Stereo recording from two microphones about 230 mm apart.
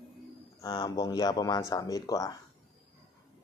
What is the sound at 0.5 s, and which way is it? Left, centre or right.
Speech, centre.